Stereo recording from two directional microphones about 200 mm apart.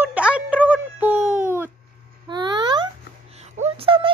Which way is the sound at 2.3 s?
20° right (ahead or behind).